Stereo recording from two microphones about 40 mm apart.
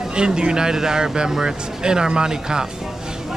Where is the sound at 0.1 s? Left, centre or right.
Right.